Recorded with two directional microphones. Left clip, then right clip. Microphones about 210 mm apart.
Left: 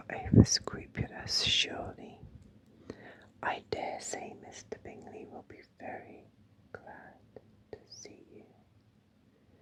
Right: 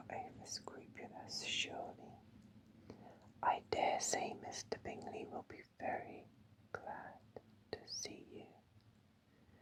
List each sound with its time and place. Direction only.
0.1 s whispering: 30° left (ahead or behind); by 8.5 s centre (ahead or behind)